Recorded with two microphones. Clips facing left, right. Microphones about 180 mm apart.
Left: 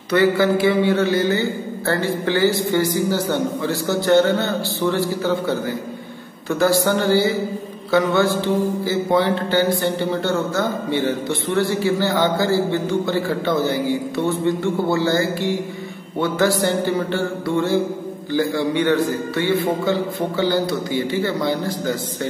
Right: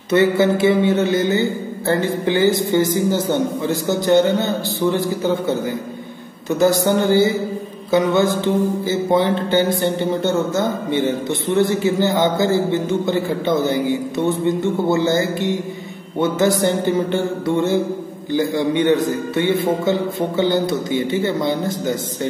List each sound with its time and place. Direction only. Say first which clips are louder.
0.1 s a man's voice: right 1 dB; 20° right (ahead or behind)